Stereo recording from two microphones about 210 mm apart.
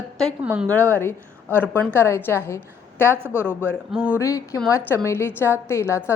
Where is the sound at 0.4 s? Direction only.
5° right (ahead or behind).